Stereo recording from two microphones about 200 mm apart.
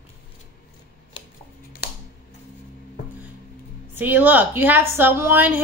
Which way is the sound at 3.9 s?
10° right (ahead or behind).